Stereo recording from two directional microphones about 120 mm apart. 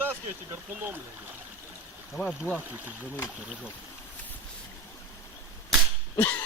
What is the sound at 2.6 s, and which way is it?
Speech, 15° right (ahead or behind).